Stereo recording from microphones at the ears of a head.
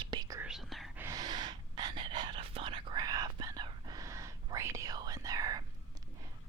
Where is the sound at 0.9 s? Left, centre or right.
Right.